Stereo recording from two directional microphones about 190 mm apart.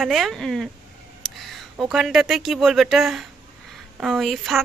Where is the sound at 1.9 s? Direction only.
Centre (ahead or behind).